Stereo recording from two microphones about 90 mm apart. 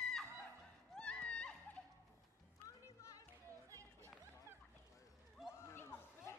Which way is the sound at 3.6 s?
35° right (ahead or behind).